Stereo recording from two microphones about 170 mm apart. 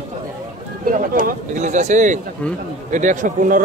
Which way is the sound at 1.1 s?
50° right (ahead or behind).